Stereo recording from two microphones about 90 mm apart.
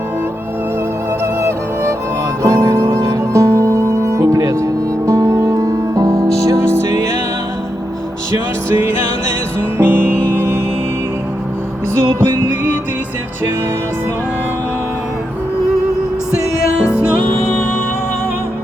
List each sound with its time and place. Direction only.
1.2 s music: 30° right (ahead or behind)
9.7 s music: 20° right (ahead or behind)
12.2 s music: 30° right (ahead or behind)